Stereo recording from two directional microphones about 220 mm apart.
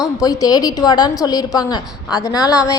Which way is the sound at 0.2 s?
15° left (ahead or behind).